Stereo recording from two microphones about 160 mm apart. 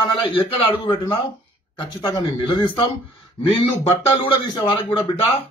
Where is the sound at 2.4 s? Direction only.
30° left (ahead or behind).